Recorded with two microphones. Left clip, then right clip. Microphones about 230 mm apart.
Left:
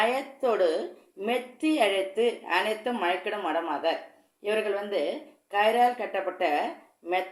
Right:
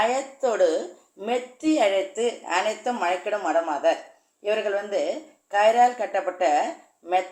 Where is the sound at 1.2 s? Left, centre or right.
Left.